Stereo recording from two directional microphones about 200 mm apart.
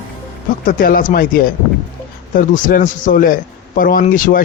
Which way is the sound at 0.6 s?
45° left (ahead or behind).